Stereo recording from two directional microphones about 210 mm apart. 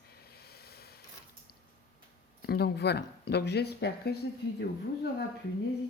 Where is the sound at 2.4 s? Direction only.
50° left (ahead or behind).